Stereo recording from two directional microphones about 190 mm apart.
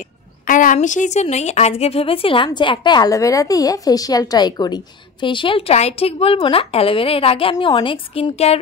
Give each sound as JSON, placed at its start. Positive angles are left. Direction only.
{"t": 0.5, "sound": "speech", "side_deg": 45}